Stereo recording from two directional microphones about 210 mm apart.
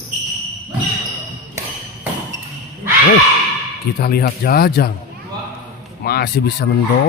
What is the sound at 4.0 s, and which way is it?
Speech, 50° left (ahead or behind).